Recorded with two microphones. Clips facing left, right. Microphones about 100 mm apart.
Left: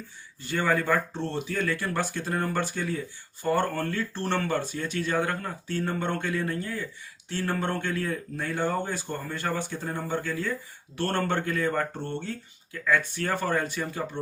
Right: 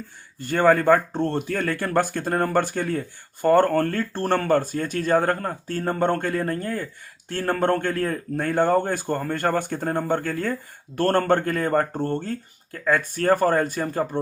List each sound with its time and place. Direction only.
0.3 s speech: 50° right (ahead or behind)